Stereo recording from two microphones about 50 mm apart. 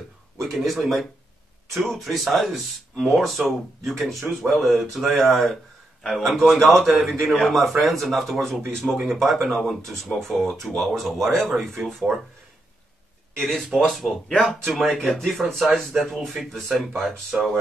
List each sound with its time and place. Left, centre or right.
0.4 s speech: centre
13.4 s speech: centre
17.3 s speech: centre